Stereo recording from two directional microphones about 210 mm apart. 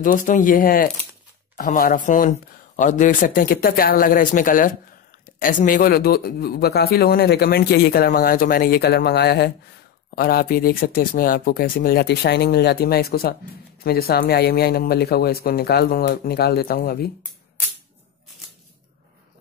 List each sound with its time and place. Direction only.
0.0 s a man's voice: 40° left (ahead or behind)